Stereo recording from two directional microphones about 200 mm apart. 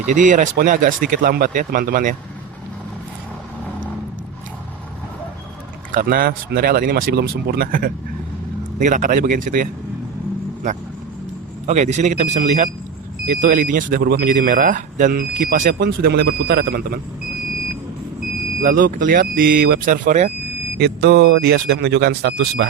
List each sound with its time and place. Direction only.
0.1 s speech: 40° right (ahead or behind)
5.9 s speech: 45° right (ahead or behind)
11.6 s speech: 35° right (ahead or behind); by 17.0 s 50° right (ahead or behind)
18.6 s speech: 45° right (ahead or behind)
20.7 s speech: 55° right (ahead or behind)